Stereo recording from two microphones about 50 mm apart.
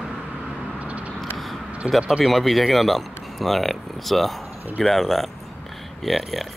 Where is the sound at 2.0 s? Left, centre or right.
Centre.